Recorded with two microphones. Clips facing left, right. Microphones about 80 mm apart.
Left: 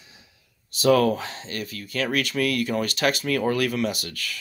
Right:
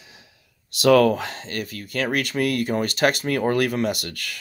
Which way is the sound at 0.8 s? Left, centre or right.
Right.